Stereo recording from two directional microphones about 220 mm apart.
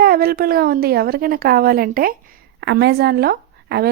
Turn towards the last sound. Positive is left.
turn(degrees=-45)  # may be behind; listen again after turning